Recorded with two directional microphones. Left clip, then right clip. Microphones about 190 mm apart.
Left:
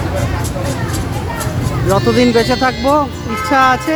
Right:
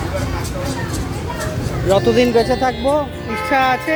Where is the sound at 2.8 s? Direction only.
30° left (ahead or behind).